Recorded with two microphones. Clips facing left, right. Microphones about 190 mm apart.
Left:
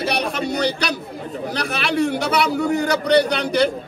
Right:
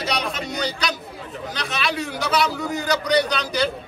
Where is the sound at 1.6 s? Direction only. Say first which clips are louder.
Left 7 dB; 60° left (ahead or behind).